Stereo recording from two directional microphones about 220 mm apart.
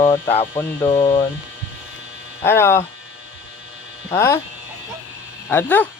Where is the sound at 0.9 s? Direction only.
25° left (ahead or behind).